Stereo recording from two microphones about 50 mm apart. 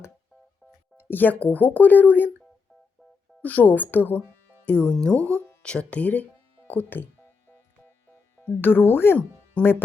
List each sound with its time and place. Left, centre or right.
1.0 s speech: left
3.4 s speech: left
4.6 s speech: left
8.4 s speech: left
9.6 s speech: left